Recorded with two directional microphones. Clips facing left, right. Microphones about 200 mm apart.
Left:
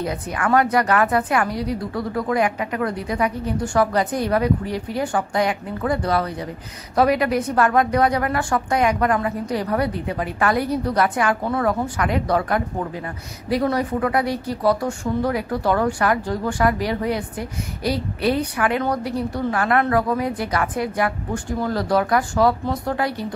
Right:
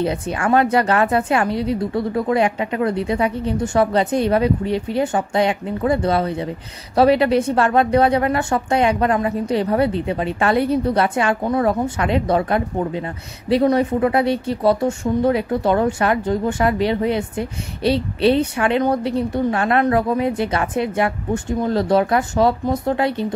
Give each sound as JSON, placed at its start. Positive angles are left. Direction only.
{"t": 0.0, "sound": "a woman's voice", "side_deg": -25}